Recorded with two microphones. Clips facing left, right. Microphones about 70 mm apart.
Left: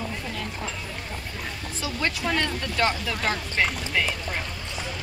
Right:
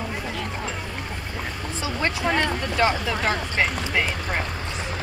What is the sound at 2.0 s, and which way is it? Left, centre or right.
Speech, right.